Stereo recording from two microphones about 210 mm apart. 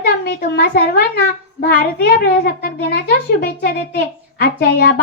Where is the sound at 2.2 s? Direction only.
50° left (ahead or behind).